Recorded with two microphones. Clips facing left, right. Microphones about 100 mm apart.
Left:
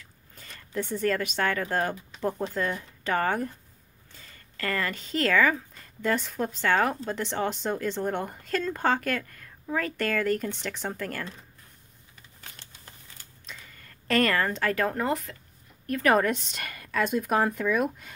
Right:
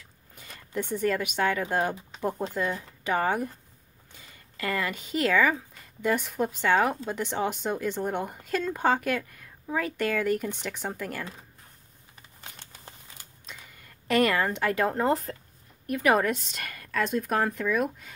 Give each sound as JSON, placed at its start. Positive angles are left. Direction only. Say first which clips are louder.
{"t": 0.4, "sound": "a sound", "louder": "right 1 dB", "side_deg": -15}
{"t": 0.9, "sound": "speech", "louder": "even", "side_deg": -15}
{"t": 3.0, "sound": "speech", "louder": "even", "side_deg": -10}
{"t": 13.7, "sound": "speech", "louder": "right 1 dB", "side_deg": -15}
{"t": 15.9, "sound": "a woman's voice", "louder": "left 1 dB", "side_deg": -10}